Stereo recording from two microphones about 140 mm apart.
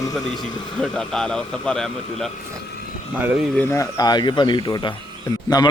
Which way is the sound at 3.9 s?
30° left (ahead or behind).